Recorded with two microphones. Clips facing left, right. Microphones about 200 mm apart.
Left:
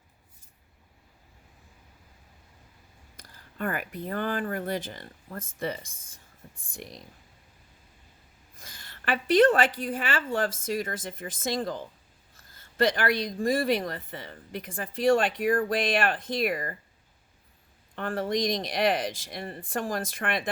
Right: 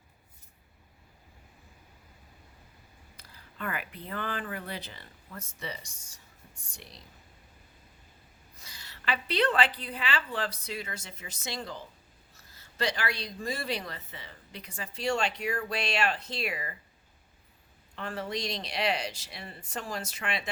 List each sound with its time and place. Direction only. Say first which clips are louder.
3.2 s speech: left 7 dB; 45° left (ahead or behind)
8.5 s speech: left 3 dB; 50° left (ahead or behind)
17.9 s speech: left 7 dB; 50° left (ahead or behind)